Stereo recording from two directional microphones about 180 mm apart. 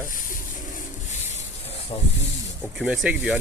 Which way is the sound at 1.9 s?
30° left (ahead or behind).